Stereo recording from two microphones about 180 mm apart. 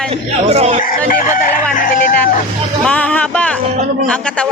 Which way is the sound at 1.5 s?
45° left (ahead or behind).